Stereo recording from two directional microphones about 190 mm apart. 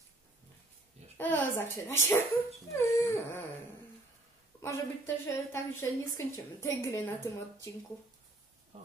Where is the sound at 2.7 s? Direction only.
15° left (ahead or behind).